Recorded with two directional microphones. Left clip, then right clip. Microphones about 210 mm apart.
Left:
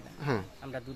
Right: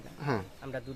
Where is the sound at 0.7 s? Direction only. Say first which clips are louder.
Right 3 dB; 15° right (ahead or behind).